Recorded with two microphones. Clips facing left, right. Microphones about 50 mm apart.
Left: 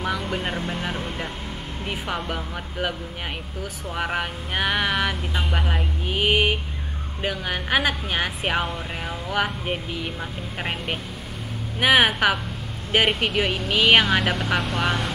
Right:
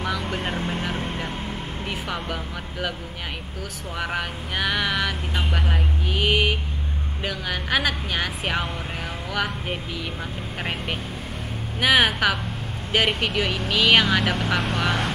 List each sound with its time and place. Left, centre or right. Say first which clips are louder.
0.0 s speech: left 1 dB; centre
1.9 s speech: left 2 dB; centre
3.9 s speech: left 1 dB; centre